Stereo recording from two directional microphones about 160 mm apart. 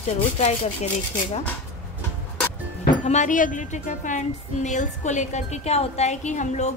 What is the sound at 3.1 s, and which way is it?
A woman's voice, 50° left (ahead or behind).